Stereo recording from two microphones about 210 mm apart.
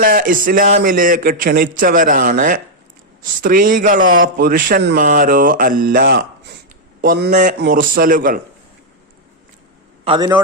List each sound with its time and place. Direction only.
0.0 s speech: 40° right (ahead or behind)
10.0 s a man's voice: 20° right (ahead or behind)